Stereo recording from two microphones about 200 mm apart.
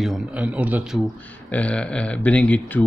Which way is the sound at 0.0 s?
5° right (ahead or behind).